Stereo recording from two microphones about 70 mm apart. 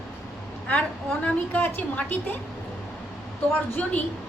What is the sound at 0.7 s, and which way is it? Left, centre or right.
A woman's voice, left.